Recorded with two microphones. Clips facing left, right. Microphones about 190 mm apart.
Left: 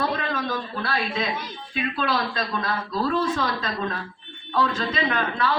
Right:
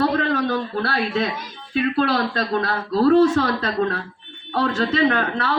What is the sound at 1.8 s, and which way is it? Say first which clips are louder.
A woman's voice: right 6 dB; 70° right (ahead or behind).